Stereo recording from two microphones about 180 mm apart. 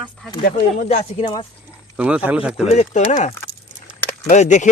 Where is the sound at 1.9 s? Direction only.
5° right (ahead or behind).